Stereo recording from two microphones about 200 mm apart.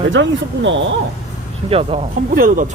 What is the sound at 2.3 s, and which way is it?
Speech, 45° right (ahead or behind).